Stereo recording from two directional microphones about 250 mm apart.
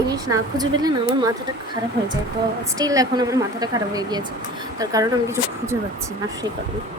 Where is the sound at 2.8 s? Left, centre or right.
Centre.